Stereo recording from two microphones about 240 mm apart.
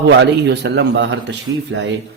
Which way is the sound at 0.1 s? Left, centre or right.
Right.